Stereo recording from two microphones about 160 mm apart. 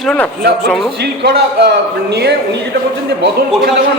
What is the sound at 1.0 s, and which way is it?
A man's voice, 90° right.